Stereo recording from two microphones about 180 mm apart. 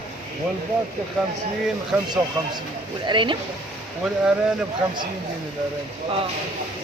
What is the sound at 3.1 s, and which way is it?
Speech, 25° right (ahead or behind).